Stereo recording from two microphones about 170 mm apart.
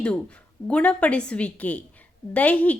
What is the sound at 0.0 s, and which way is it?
Speech, 5° left (ahead or behind).